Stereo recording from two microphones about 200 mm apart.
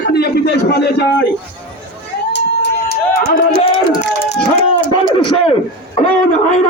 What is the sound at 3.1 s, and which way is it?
Speech, 45° left (ahead or behind).